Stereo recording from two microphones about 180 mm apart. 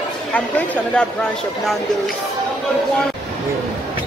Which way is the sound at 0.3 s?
10° left (ahead or behind).